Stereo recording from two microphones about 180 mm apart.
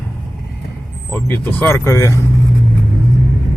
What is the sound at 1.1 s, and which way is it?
Speech, 10° left (ahead or behind).